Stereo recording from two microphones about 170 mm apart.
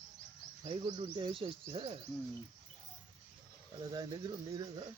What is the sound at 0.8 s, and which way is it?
Speech, 30° right (ahead or behind).